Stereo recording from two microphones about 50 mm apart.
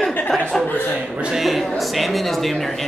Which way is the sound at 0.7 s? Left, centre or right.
Left.